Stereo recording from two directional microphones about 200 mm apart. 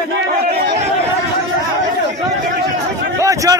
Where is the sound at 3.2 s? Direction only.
15° right (ahead or behind).